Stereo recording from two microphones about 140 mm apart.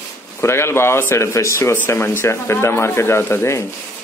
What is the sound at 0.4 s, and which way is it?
Speech, 20° left (ahead or behind).